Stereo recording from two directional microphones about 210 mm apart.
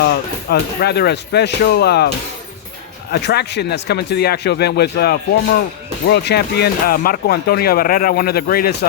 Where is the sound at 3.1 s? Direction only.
50° left (ahead or behind).